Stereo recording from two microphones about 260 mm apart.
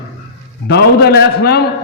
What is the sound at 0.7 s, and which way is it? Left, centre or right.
Speech, left.